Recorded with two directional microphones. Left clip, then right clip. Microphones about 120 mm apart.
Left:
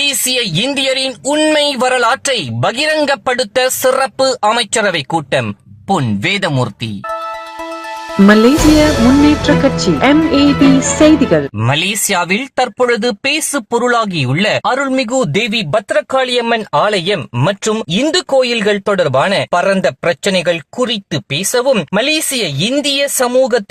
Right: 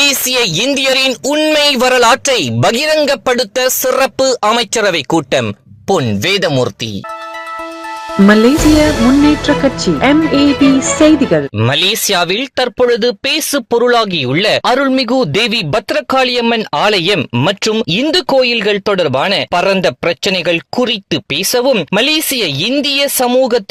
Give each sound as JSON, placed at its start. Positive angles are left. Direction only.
{"t": 0.0, "sound": "speech", "side_deg": -45}
{"t": 1.3, "sound": "speech", "side_deg": -35}
{"t": 1.5, "sound": "speech", "side_deg": -55}
{"t": 3.9, "sound": "speech", "side_deg": -55}
{"t": 5.9, "sound": "speech", "side_deg": -35}
{"t": 8.1, "sound": "speech", "side_deg": 0}
{"t": 11.6, "sound": "speech", "side_deg": -45}
{"t": 14.6, "sound": "a man's voice", "side_deg": -80}